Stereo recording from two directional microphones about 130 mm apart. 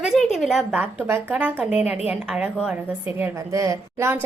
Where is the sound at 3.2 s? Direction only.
20° right (ahead or behind).